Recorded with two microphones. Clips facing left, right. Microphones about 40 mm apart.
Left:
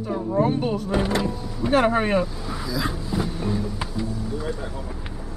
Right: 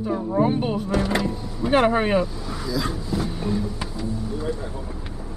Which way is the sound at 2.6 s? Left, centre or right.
Centre.